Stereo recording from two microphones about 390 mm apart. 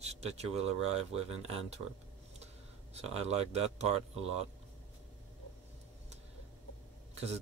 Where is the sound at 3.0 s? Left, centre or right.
Centre.